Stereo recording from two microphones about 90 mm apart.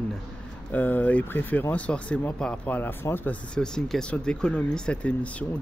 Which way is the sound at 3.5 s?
10° left (ahead or behind).